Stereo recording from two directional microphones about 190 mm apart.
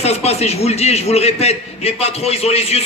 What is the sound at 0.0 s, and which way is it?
A man's voice, 35° left (ahead or behind).